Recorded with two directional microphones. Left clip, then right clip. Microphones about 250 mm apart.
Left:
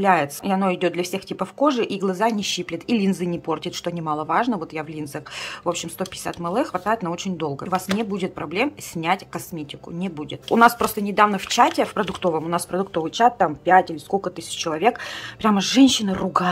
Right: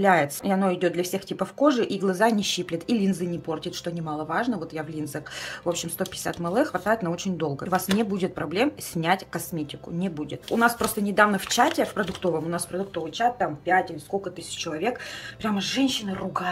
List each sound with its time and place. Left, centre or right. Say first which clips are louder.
0.0 s speech: left 2 dB; centre
12.9 s speech: left 7 dB; centre